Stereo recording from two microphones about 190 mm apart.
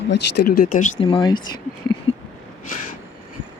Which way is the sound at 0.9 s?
30° left (ahead or behind).